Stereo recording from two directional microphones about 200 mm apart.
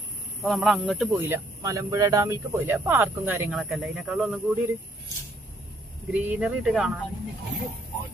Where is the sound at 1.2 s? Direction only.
15° right (ahead or behind).